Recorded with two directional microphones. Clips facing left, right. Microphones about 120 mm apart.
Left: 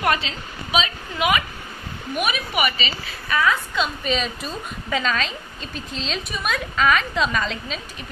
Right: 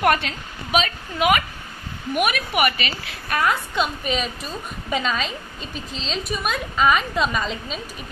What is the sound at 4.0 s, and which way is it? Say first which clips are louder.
A woman's voice: left 1 dB; 5° right (ahead or behind).